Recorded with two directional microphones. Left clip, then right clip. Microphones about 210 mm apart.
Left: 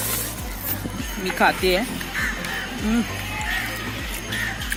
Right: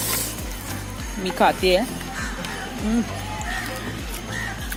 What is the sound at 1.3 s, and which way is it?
Speech, 20° right (ahead or behind).